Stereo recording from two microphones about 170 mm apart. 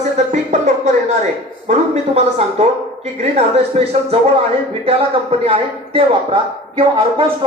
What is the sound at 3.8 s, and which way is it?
Speech, 35° right (ahead or behind).